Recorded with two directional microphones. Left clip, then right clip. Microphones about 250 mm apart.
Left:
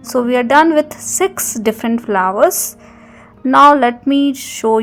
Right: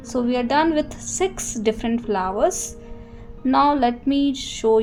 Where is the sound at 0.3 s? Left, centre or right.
Centre.